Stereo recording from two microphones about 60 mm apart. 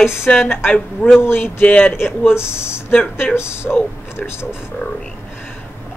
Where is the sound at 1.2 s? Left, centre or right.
Left.